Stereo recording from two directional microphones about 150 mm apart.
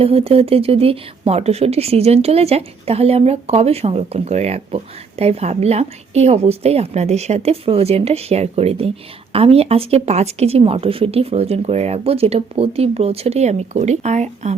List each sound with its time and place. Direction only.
0.0 s speech: 40° right (ahead or behind)